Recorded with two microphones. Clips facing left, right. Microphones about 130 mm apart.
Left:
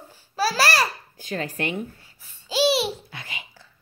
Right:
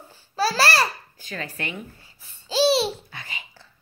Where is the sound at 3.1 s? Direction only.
50° left (ahead or behind).